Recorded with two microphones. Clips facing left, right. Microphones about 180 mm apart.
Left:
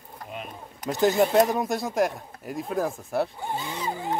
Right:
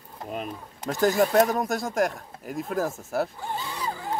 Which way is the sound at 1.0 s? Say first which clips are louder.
Left 1 dB; 20° left (ahead or behind).